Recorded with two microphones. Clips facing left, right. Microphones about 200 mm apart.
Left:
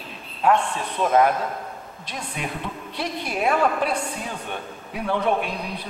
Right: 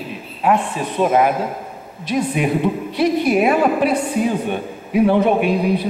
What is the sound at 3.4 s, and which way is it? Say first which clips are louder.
A man's voice: right 6 dB; 15° right (ahead or behind).